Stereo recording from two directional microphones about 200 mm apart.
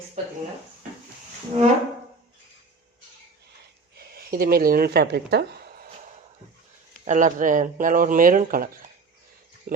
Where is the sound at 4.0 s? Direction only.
50° right (ahead or behind).